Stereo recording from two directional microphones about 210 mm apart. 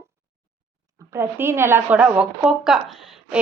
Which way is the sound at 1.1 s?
10° right (ahead or behind).